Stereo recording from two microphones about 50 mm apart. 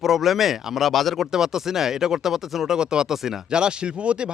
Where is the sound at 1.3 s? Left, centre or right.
Centre.